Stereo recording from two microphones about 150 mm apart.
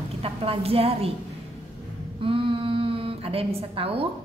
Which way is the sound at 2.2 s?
35° right (ahead or behind).